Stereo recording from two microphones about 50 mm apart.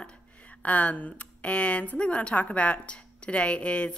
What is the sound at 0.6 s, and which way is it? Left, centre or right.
A woman's voice, left.